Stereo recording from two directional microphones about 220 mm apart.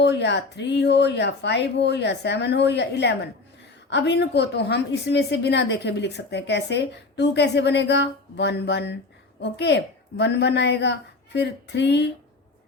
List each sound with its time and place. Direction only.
0.0 s a woman's voice: 50° left (ahead or behind)